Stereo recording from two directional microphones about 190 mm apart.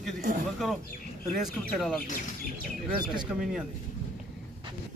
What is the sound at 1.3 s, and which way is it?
Speech, centre (ahead or behind).